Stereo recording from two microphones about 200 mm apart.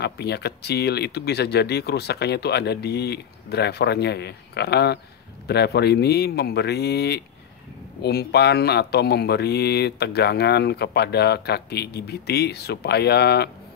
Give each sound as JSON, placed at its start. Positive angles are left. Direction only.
{"t": 0.0, "sound": "speech", "side_deg": 55}